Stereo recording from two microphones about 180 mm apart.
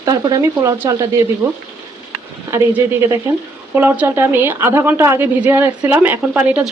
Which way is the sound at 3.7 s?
10° right (ahead or behind).